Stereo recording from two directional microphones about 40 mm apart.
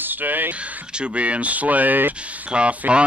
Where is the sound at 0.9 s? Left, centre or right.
Right.